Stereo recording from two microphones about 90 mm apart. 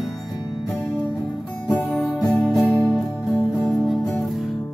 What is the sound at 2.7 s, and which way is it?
Music, 35° left (ahead or behind).